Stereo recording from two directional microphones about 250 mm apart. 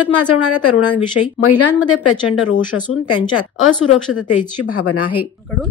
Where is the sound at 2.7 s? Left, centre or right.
Left.